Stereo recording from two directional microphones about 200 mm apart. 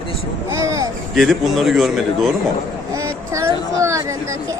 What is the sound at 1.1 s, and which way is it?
A man's voice, centre (ahead or behind).